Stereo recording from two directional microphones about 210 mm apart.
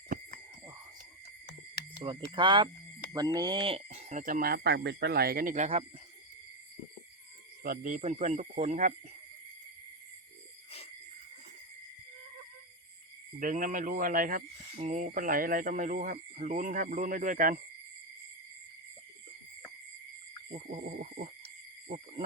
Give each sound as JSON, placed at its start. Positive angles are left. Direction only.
{"t": 2.0, "sound": "speech", "side_deg": -20}
{"t": 7.6, "sound": "speech", "side_deg": -40}
{"t": 13.4, "sound": "speech", "side_deg": -40}
{"t": 20.5, "sound": "wild animals", "side_deg": -30}
{"t": 21.8, "sound": "cricket", "side_deg": -30}